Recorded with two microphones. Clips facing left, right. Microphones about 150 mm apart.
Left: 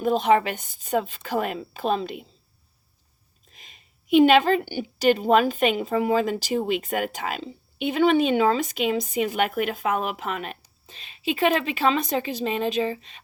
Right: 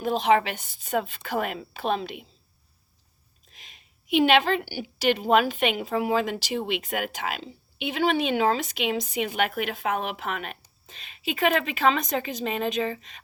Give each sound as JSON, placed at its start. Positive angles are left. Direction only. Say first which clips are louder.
{"t": 0.0, "sound": "speech", "louder": "left 2 dB", "side_deg": 50}
{"t": 3.5, "sound": "a sound", "louder": "left 1 dB", "side_deg": 45}
{"t": 4.7, "sound": "a woman's voice", "louder": "left 4 dB", "side_deg": 45}